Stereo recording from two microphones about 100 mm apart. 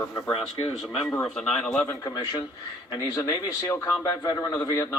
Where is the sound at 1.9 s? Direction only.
35° left (ahead or behind).